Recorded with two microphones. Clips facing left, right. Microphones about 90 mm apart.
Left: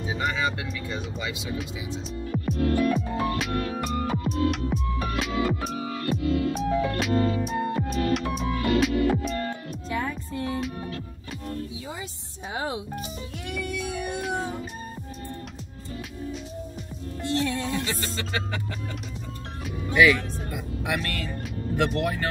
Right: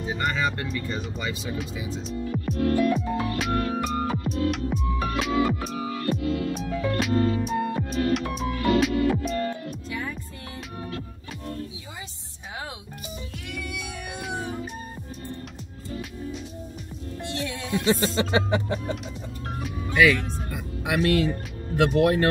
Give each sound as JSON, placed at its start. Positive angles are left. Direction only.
{"t": 0.0, "sound": "speech", "side_deg": 0}
{"t": 2.3, "sound": "music", "side_deg": 0}
{"t": 17.2, "sound": "music", "side_deg": 35}
{"t": 17.8, "sound": "music", "side_deg": -25}
{"t": 19.6, "sound": "music", "side_deg": 0}
{"t": 21.4, "sound": "speech", "side_deg": -5}